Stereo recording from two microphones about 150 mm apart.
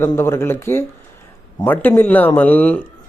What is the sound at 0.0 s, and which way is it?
A man's voice, 15° left (ahead or behind).